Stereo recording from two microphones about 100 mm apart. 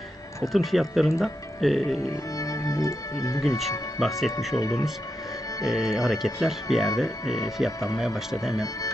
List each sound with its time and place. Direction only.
0.5 s speech: centre (ahead or behind)
2.0 s speech: 35° left (ahead or behind)
3.4 s speech: centre (ahead or behind)
4.6 s speech: 35° left (ahead or behind)
5.7 s speech: 5° right (ahead or behind)
8.0 s speech: 5° right (ahead or behind)